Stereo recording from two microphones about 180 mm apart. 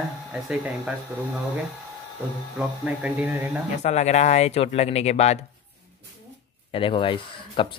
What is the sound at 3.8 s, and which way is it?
Speech, 40° left (ahead or behind).